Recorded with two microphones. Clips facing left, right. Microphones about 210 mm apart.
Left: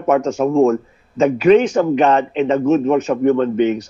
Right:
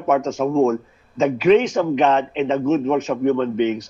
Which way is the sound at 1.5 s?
45° left (ahead or behind).